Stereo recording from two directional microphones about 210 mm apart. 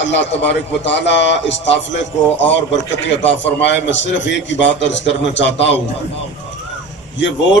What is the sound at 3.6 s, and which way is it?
A man's voice, 60° left (ahead or behind).